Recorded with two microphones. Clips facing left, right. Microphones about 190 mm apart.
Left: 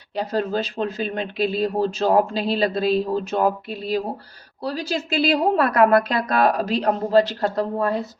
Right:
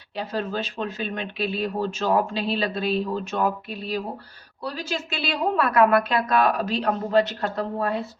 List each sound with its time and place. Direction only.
0.2 s speech: 40° left (ahead or behind)